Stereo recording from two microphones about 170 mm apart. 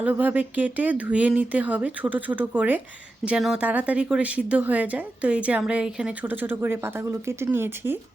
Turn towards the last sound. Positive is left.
turn(degrees=-15)  # may be behind; listen again after turning